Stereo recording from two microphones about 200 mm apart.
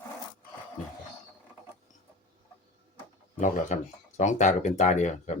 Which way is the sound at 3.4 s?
40° left (ahead or behind).